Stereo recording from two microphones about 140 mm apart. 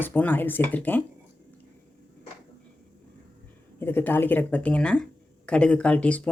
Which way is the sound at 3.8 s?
15° left (ahead or behind).